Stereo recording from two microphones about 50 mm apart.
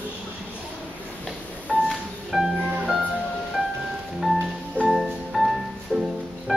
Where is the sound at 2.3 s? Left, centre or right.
Centre.